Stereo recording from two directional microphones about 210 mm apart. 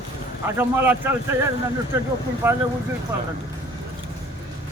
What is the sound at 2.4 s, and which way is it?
Speech, 10° right (ahead or behind).